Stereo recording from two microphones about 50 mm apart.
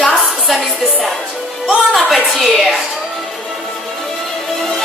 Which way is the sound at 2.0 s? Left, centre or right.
Centre.